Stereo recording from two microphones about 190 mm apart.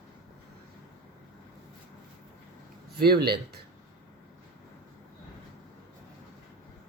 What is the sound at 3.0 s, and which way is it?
Speech, 55° right (ahead or behind).